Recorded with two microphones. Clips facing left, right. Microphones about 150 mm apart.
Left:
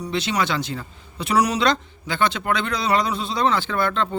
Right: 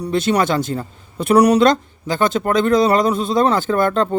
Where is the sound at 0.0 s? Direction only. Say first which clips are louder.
Right 7 dB; 50° right (ahead or behind).